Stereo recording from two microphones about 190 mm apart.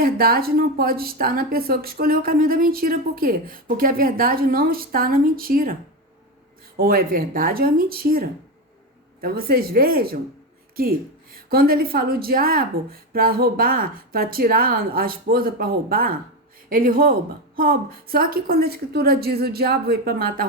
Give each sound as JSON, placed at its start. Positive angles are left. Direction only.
{"t": 0.0, "sound": "a woman's voice", "side_deg": -50}
{"t": 6.7, "sound": "a woman's voice", "side_deg": -50}